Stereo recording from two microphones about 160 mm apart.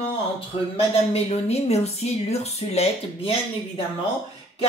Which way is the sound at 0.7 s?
40° left (ahead or behind).